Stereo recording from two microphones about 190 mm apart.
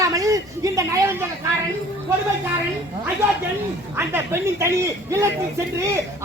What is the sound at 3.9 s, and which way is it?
A woman's voice, 15° right (ahead or behind).